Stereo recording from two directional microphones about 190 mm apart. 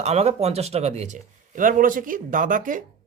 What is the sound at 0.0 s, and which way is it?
Speech, 35° right (ahead or behind).